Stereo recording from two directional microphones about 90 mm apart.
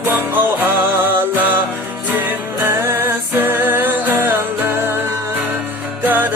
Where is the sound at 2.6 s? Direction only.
25° right (ahead or behind).